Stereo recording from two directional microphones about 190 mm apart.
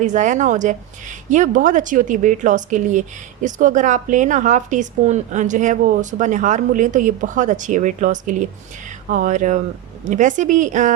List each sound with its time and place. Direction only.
0.0 s a woman's voice: 40° right (ahead or behind)